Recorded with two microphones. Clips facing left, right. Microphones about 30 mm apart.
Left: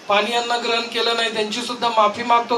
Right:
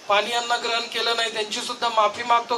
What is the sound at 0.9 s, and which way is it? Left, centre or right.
Speech, left.